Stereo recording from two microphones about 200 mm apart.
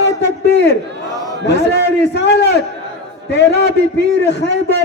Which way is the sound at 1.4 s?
60° left (ahead or behind).